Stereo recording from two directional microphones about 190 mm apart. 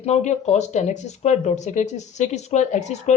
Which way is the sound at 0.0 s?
35° left (ahead or behind).